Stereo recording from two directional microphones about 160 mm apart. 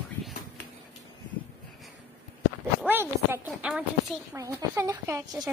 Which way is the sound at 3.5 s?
10° right (ahead or behind).